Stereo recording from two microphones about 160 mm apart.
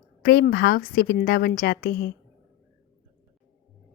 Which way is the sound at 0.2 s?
85° left.